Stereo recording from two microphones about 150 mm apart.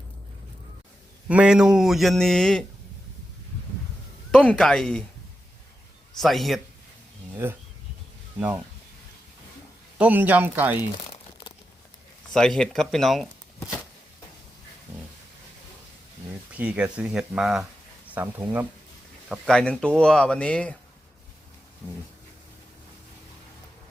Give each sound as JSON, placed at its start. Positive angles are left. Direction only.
{"t": 1.3, "sound": "speech", "side_deg": -5}
{"t": 4.3, "sound": "speech", "side_deg": 5}
{"t": 6.1, "sound": "speech", "side_deg": 0}
{"t": 7.4, "sound": "speech", "side_deg": -15}
{"t": 10.0, "sound": "speech", "side_deg": -10}
{"t": 11.1, "sound": "crumpling", "side_deg": 30}
{"t": 12.3, "sound": "speech", "side_deg": 5}
{"t": 16.6, "sound": "speech", "side_deg": -10}
{"t": 19.3, "sound": "speech", "side_deg": 5}